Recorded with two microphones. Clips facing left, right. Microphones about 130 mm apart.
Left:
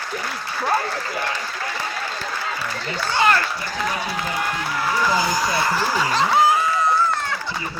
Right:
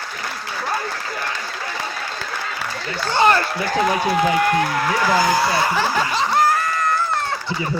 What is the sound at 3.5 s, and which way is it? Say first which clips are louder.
A man's voice: right 7 dB; 65° right (ahead or behind).